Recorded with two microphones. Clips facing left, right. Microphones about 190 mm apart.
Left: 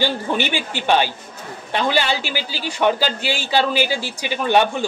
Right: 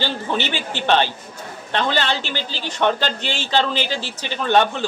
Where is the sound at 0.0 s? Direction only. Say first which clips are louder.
Left 2 dB; 15° left (ahead or behind).